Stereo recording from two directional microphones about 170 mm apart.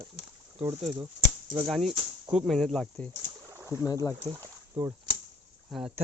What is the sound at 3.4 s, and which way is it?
Boat, 15° right (ahead or behind).